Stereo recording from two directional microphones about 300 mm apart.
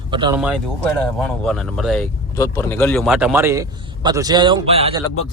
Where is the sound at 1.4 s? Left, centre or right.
Centre.